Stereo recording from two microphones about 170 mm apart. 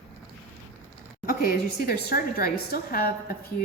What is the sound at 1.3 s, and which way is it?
A woman's voice, 60° left (ahead or behind).